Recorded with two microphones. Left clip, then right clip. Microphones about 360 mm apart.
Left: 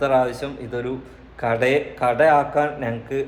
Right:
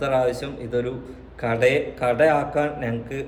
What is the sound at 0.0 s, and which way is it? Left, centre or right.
A man's voice, centre.